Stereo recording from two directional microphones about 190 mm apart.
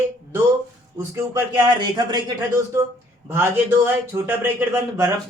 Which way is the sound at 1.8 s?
25° right (ahead or behind).